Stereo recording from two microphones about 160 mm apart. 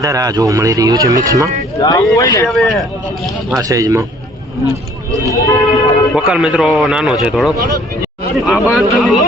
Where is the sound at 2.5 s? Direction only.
Centre (ahead or behind).